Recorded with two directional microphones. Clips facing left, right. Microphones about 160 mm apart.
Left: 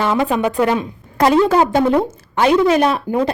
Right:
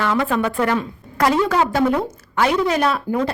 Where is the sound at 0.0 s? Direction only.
20° left (ahead or behind).